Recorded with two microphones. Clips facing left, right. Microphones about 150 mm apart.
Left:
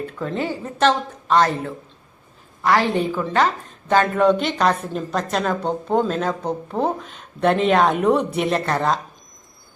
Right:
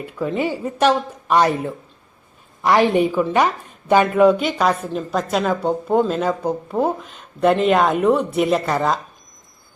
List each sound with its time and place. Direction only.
0.0 s a woman's voice: 10° right (ahead or behind)